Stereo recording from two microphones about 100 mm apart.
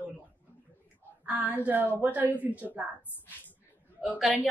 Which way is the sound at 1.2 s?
15° right (ahead or behind).